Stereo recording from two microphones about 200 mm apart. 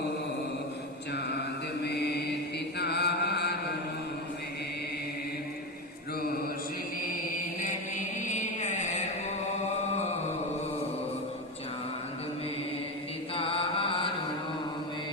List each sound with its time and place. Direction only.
1.8 s chant: 55° left (ahead or behind)
7.6 s chant: 40° left (ahead or behind)
13.3 s chant: 25° left (ahead or behind)